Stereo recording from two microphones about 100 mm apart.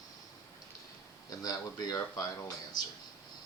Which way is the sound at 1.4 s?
40° left (ahead or behind).